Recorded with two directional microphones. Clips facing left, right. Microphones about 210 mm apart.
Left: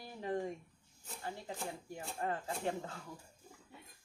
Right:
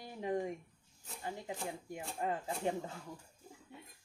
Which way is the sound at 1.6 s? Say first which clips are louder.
Right 1 dB; 15° right (ahead or behind).